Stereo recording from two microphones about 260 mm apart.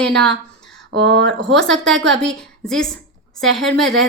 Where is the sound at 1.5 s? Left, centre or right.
Centre.